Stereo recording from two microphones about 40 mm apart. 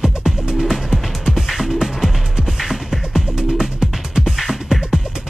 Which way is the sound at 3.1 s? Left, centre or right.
Centre.